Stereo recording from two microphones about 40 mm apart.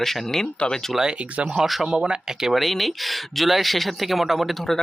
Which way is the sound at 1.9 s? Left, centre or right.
Right.